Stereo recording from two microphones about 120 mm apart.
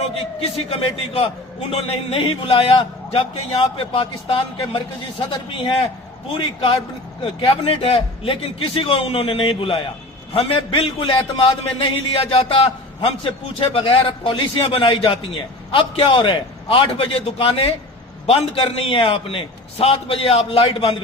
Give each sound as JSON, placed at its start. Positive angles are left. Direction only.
{"t": 0.0, "sound": "a man's voice", "side_deg": 55}